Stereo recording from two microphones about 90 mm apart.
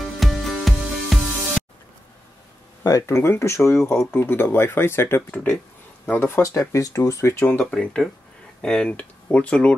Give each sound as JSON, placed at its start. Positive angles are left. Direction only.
{"t": 0.2, "sound": "music", "side_deg": 0}
{"t": 2.8, "sound": "speech", "side_deg": 35}
{"t": 5.3, "sound": "speech", "side_deg": 15}
{"t": 6.0, "sound": "speech", "side_deg": 25}
{"t": 7.4, "sound": "speech", "side_deg": 15}